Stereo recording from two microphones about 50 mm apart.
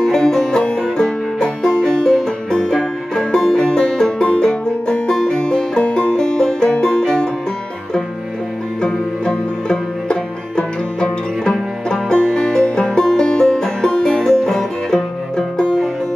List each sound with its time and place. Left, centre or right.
0.0 s music: centre
8.8 s music: centre